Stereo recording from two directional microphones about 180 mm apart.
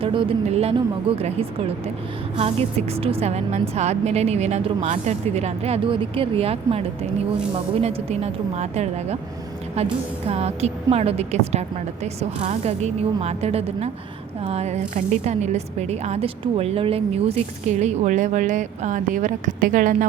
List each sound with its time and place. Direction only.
0.0 s a woman's voice: 30° right (ahead or behind); by 20.1 s 45° right (ahead or behind)